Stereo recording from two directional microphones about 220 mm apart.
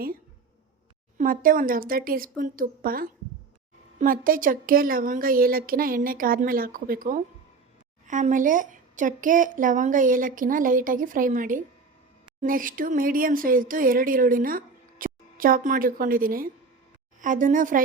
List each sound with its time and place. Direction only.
1.2 s speech: 40° right (ahead or behind)